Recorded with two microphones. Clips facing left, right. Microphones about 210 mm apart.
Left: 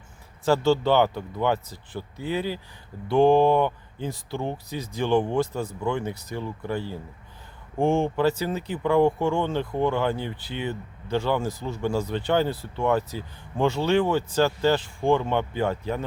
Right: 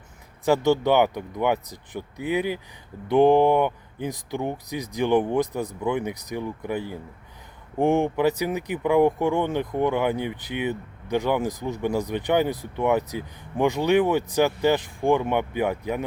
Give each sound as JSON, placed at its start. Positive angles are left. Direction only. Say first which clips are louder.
{"t": 0.4, "sound": "speech", "louder": "right 1 dB", "side_deg": -15}